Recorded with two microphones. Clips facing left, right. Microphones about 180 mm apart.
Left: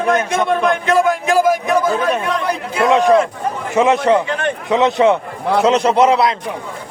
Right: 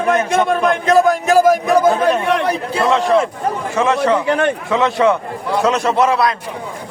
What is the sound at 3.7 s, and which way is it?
Speech, 20° left (ahead or behind).